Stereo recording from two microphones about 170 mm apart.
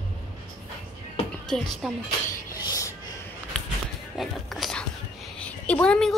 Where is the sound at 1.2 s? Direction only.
35° left (ahead or behind).